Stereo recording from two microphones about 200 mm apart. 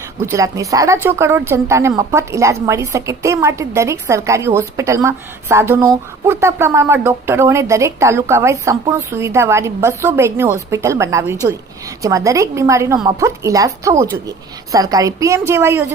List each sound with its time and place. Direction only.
0.3 s speech: 15° right (ahead or behind)